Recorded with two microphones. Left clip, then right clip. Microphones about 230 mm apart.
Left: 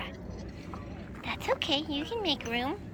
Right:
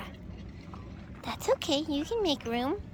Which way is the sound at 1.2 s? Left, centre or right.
Right.